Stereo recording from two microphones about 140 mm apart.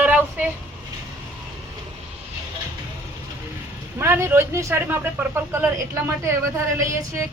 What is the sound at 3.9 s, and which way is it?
Speech, 20° right (ahead or behind).